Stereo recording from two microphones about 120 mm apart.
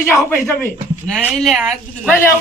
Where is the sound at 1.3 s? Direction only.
Centre (ahead or behind).